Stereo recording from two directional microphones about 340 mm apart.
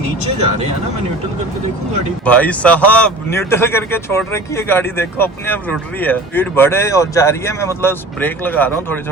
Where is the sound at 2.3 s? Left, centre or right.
Centre.